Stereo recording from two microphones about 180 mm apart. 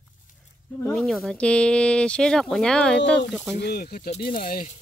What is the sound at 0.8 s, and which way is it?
Speech, centre (ahead or behind).